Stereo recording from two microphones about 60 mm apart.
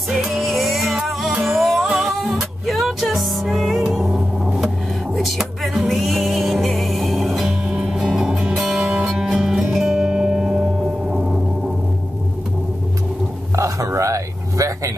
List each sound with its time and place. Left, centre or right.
0.1 s music: centre
0.4 s music: centre
13.6 s a sound: right